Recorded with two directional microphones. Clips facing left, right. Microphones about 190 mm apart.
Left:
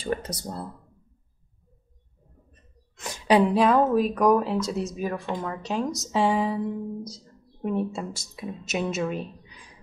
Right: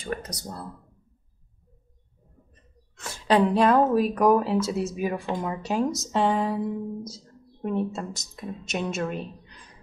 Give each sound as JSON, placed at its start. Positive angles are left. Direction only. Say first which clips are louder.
{"t": 0.0, "sound": "speech", "louder": "left 3 dB", "side_deg": 30}
{"t": 3.0, "sound": "speech", "louder": "left 1 dB", "side_deg": 15}